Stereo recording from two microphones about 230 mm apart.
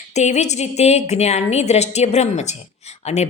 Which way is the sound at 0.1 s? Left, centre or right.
Left.